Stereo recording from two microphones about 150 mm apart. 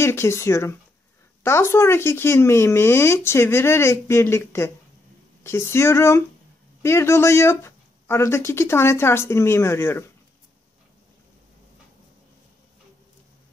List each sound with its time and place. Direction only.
0.0 s speech: 15° left (ahead or behind)